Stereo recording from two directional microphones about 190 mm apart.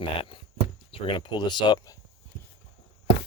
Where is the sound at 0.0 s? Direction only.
25° left (ahead or behind).